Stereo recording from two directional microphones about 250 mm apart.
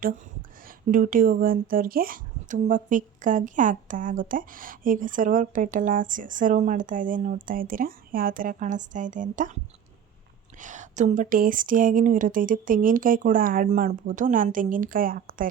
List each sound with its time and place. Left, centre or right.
0.9 s speech: right
10.6 s speech: right